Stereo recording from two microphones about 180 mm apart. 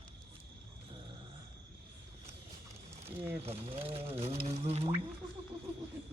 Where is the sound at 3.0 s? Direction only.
30° right (ahead or behind).